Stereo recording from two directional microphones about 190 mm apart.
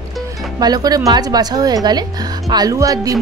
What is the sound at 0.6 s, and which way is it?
Speech, 20° right (ahead or behind).